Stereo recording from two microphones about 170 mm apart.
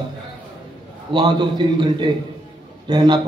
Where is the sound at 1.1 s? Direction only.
25° right (ahead or behind).